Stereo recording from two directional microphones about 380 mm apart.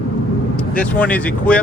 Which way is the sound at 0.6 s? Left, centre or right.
Centre.